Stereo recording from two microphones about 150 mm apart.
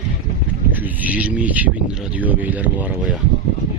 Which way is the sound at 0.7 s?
10° right (ahead or behind).